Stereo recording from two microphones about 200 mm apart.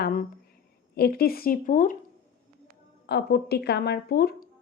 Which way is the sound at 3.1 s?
55° left (ahead or behind).